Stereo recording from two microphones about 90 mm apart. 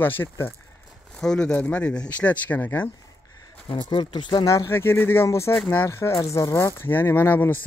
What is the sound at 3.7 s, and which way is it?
Speech, 60° left (ahead or behind).